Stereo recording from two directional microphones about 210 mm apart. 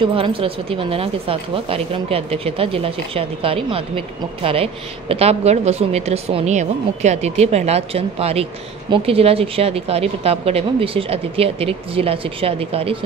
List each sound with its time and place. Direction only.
0.0 s speech: 25° right (ahead or behind)